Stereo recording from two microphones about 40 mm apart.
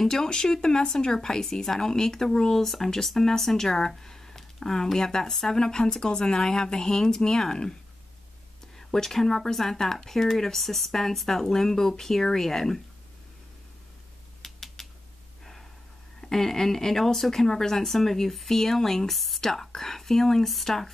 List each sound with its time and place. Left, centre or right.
0.0 s speech: centre
8.7 s speech: centre
14.4 s typing: centre
16.2 s speech: centre